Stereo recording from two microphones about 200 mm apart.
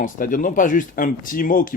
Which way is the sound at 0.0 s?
40° left (ahead or behind).